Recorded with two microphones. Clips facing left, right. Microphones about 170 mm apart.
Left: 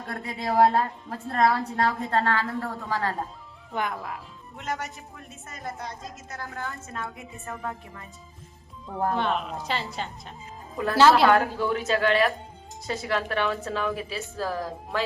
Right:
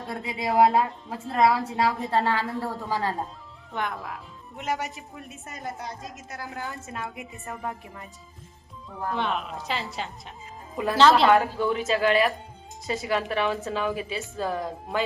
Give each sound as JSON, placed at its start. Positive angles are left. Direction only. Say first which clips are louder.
{"t": 0.0, "sound": "a woman's voice", "louder": "right 1 dB", "side_deg": 0}
{"t": 3.7, "sound": "a woman's voice", "louder": "left 1 dB", "side_deg": 0}
{"t": 4.5, "sound": "a woman's voice", "louder": "right 3 dB", "side_deg": -20}
{"t": 5.6, "sound": "a woman's voice", "louder": "even", "side_deg": 0}
{"t": 6.5, "sound": "a woman's voice", "louder": "right 1 dB", "side_deg": -20}
{"t": 9.1, "sound": "a woman's voice", "louder": "left 2 dB", "side_deg": 0}